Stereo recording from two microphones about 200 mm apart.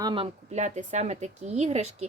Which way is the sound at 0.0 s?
25° right (ahead or behind).